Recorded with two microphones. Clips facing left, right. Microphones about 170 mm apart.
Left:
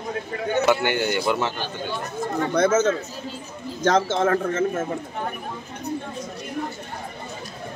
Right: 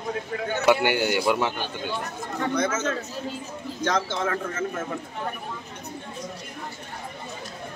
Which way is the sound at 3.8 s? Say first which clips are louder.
Left 7 dB; 50° left (ahead or behind).